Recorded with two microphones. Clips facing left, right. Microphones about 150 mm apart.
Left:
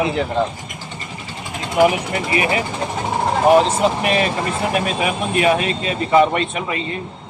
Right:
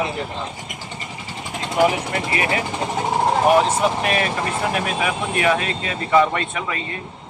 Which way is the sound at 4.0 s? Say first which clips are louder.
Left 3 dB; 25° left (ahead or behind).